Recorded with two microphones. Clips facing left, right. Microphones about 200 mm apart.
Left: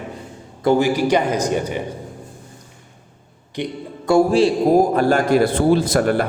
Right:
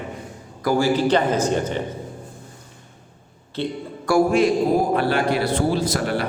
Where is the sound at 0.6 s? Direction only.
25° left (ahead or behind).